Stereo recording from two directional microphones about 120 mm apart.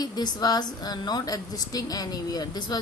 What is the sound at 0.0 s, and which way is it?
A woman's voice, 35° left (ahead or behind).